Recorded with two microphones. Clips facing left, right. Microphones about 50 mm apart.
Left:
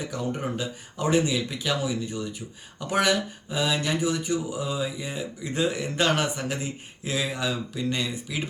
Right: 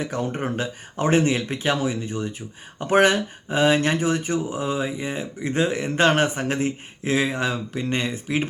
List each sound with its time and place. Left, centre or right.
0.0 s speech: right